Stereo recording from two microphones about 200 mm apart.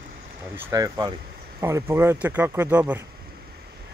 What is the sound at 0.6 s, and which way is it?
A man's voice, 15° right (ahead or behind).